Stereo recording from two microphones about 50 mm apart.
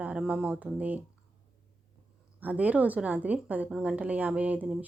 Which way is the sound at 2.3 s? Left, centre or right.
Right.